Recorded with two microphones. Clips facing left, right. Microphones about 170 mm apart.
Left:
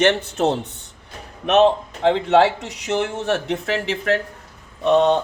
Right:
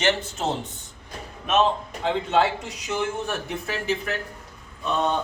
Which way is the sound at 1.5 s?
70° left (ahead or behind).